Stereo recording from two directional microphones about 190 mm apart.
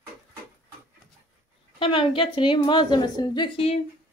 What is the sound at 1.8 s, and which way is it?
A woman's voice, 25° left (ahead or behind).